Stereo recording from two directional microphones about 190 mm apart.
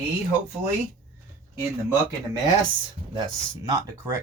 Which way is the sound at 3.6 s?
20° right (ahead or behind).